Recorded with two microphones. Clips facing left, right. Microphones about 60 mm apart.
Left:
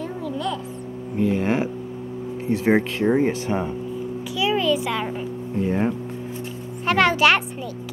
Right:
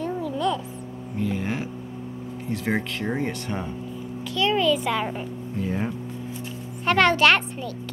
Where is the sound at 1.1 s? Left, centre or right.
Left.